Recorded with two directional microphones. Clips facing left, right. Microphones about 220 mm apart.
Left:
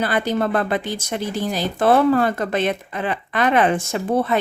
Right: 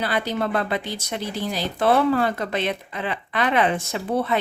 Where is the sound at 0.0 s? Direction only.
50° left (ahead or behind).